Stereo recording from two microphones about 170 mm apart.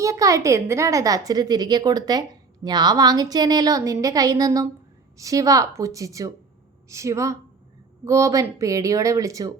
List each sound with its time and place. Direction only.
0.0 s a woman's voice: 20° right (ahead or behind)